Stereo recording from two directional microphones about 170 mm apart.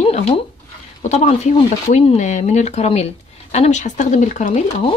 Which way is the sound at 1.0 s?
40° left (ahead or behind).